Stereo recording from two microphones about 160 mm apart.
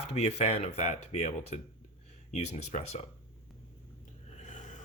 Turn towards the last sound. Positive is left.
turn(degrees=50)  # may be behind; listen again after turning